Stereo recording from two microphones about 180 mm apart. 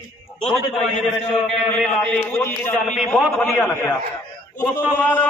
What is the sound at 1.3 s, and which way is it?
A man's voice, 5° left (ahead or behind).